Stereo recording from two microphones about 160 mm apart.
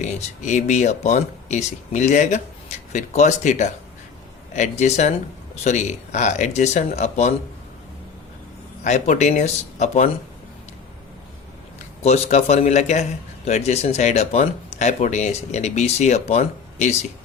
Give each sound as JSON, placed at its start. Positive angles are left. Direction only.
{"t": 0.0, "sound": "a man's voice", "side_deg": 50}
{"t": 8.8, "sound": "a man's voice", "side_deg": 45}
{"t": 12.0, "sound": "a man's voice", "side_deg": 45}